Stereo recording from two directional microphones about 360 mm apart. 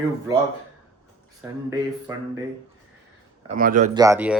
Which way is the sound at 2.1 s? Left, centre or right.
Centre.